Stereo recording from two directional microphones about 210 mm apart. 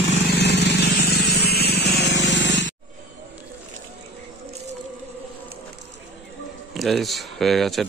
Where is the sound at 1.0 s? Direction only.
50° left (ahead or behind).